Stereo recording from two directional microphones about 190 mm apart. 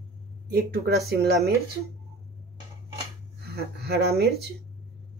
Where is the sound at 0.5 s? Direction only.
55° right (ahead or behind).